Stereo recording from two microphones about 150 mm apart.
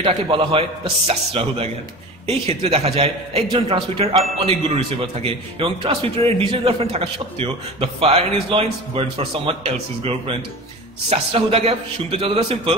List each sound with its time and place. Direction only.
0.0 s a man's voice: 35° right (ahead or behind)
5.2 s a man's voice: 35° right (ahead or behind)